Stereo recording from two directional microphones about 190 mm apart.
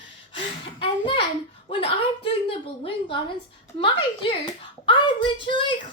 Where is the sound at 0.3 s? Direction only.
25° left (ahead or behind).